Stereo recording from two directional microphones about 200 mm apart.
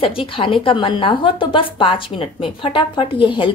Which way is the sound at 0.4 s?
25° left (ahead or behind).